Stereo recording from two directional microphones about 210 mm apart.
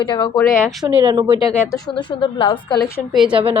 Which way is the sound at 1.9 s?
25° left (ahead or behind).